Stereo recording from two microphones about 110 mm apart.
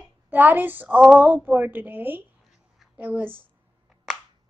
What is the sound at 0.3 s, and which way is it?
A woman's voice, 15° right (ahead or behind).